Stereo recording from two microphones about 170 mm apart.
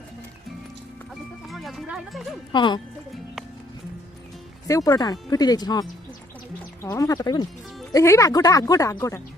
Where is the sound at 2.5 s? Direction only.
25° left (ahead or behind).